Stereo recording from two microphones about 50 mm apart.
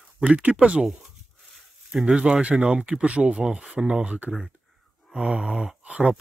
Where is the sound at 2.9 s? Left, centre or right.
Right.